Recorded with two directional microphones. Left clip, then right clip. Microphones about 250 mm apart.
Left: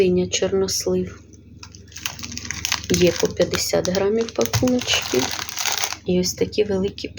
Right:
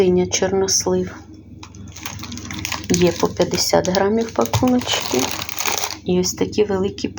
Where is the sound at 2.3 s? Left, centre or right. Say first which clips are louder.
Left 2 dB; centre.